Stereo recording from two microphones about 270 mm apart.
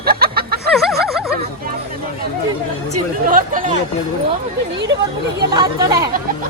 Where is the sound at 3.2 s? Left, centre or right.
Right.